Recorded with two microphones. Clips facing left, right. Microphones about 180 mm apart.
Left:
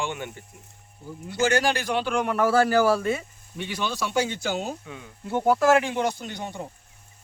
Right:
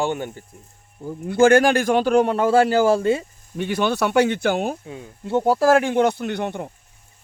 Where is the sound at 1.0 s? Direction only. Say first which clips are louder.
Right 10 dB; 50° right (ahead or behind); by 3.3 s 30° right (ahead or behind).